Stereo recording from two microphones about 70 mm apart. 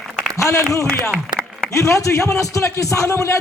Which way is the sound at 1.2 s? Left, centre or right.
Centre.